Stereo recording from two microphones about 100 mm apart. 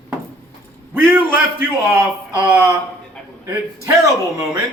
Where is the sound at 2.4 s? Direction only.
30° right (ahead or behind).